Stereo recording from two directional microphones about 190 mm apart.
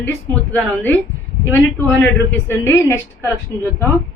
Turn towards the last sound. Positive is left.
turn(degrees=10)  # may be behind; listen again after turning